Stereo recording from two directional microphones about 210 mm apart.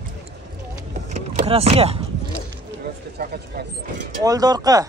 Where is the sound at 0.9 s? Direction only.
35° right (ahead or behind).